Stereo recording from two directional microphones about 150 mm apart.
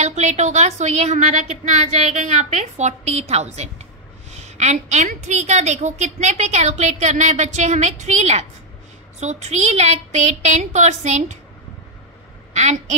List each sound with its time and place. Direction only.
0.0 s a woman's voice: 50° right (ahead or behind)
12.5 s a woman's voice: 50° right (ahead or behind)